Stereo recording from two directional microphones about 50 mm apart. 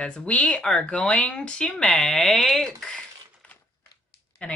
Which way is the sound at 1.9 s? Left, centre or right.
Centre.